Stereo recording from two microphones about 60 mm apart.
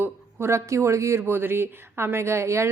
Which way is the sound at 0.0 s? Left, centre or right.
Right.